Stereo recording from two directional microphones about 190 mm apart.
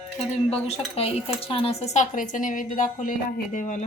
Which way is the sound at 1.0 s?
35° left (ahead or behind).